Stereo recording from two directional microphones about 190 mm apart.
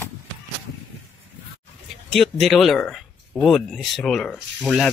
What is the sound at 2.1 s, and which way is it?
Speech, centre (ahead or behind).